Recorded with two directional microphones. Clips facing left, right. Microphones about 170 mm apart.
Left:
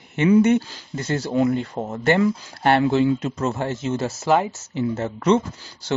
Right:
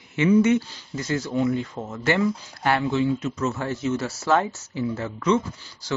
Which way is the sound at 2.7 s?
70° left (ahead or behind).